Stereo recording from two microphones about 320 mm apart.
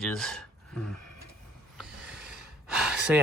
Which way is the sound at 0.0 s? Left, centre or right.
Centre.